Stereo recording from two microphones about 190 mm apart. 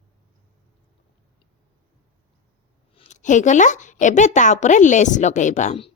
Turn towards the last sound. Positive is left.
turn(degrees=35)  # may be behind; listen again after turning